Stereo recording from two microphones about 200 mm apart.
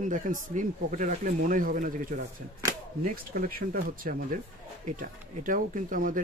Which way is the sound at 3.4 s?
45° right (ahead or behind).